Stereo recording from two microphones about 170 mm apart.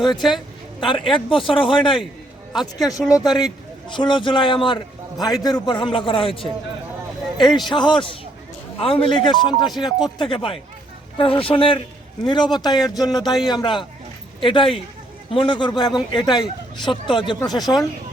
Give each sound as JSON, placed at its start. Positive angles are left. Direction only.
{"t": 0.2, "sound": "speech", "side_deg": 0}
{"t": 0.9, "sound": "speech", "side_deg": 30}
{"t": 2.5, "sound": "speech", "side_deg": 0}
{"t": 3.8, "sound": "speech", "side_deg": 30}